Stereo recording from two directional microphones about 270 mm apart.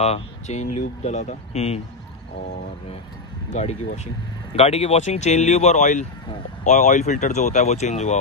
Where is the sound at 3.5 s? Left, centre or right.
Left.